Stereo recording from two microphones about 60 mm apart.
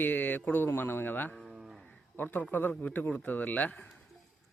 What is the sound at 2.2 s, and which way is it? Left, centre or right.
A man's voice, left.